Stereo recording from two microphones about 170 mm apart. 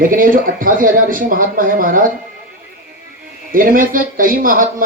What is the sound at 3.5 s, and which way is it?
Speech, 55° right (ahead or behind).